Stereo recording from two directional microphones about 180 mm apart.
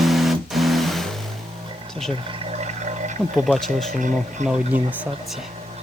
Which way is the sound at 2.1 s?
35° right (ahead or behind).